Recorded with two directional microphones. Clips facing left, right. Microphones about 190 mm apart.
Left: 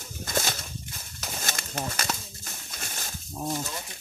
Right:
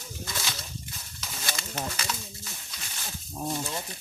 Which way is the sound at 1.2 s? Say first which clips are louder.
Left 2 dB; 50° left (ahead or behind).